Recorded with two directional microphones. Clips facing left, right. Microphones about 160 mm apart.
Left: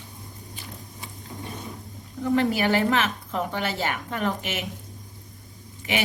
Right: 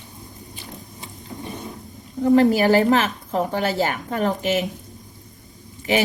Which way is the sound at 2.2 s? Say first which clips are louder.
Right 7 dB; 40° right (ahead or behind).